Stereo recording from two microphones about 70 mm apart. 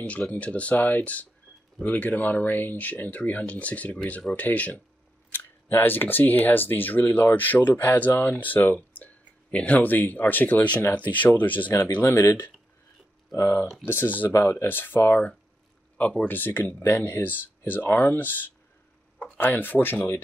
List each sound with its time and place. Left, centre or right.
0.0 s speech: centre
12.0 s speech: left
13.8 s speech: left
16.0 s speech: centre